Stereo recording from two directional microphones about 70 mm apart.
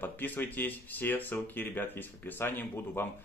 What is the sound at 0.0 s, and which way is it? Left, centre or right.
Speech, left.